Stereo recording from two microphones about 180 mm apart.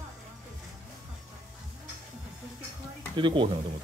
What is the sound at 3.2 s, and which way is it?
Speech, 25° right (ahead or behind).